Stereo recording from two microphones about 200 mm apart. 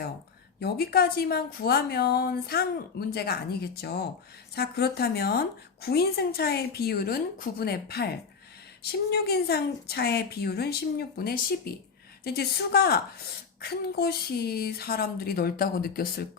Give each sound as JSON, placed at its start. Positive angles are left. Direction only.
{"t": 0.6, "sound": "a woman's voice", "side_deg": 50}